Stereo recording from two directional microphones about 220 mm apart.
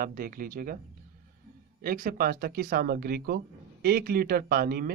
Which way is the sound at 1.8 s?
40° right (ahead or behind).